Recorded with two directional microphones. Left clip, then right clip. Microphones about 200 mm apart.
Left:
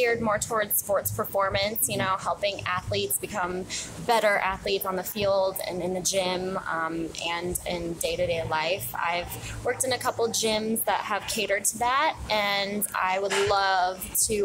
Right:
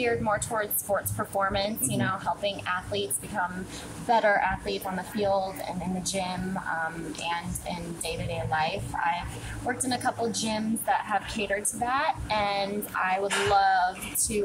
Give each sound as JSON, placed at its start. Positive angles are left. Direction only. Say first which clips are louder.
{"t": 0.0, "sound": "a woman's voice", "louder": "left 2 dB", "side_deg": 50}